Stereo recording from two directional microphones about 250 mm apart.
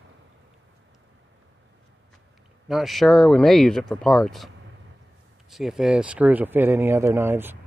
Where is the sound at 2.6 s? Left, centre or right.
Centre.